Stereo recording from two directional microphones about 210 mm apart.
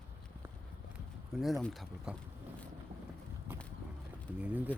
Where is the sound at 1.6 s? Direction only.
Centre (ahead or behind).